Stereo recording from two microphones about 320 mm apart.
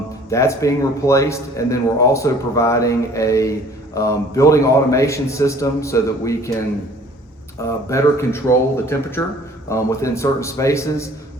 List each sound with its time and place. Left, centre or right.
0.3 s a man's voice: centre
7.9 s a man's voice: centre